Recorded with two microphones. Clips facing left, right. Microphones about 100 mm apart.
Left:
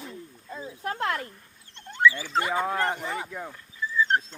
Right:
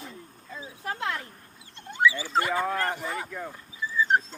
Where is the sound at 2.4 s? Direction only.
20° left (ahead or behind).